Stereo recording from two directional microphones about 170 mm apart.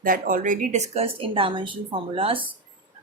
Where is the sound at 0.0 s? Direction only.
55° right (ahead or behind); by 2.5 s 30° right (ahead or behind).